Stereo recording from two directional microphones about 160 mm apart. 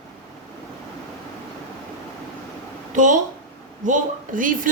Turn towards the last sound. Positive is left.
turn(degrees=-55)  # may be behind; listen again after turning